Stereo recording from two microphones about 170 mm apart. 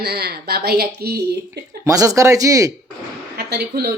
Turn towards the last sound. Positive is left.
turn(degrees=-70)  # may be behind; listen again after turning